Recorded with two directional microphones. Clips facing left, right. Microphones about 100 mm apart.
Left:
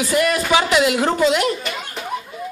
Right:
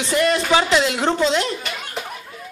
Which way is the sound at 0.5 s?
10° left (ahead or behind).